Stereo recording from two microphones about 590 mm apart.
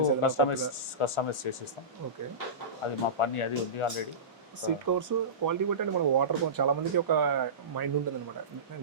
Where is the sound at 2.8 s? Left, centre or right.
Left.